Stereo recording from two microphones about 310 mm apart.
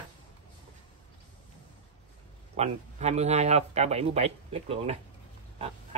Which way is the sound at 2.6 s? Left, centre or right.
Right.